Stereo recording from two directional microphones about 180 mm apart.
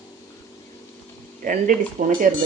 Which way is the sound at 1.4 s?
45° right (ahead or behind).